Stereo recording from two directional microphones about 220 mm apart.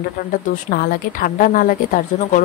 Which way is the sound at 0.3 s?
40° left (ahead or behind).